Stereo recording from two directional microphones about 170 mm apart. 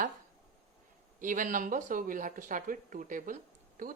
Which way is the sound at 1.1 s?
50° right (ahead or behind).